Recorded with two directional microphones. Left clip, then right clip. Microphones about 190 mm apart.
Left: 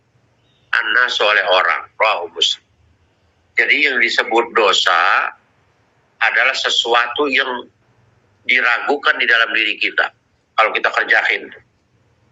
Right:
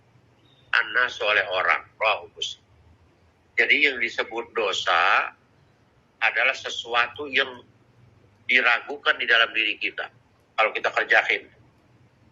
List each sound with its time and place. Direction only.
0.7 s speech: 40° left (ahead or behind)